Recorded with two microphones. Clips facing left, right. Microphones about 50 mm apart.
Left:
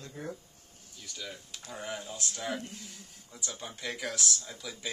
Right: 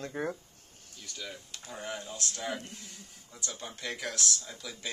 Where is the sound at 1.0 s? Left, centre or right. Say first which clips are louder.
Even; centre.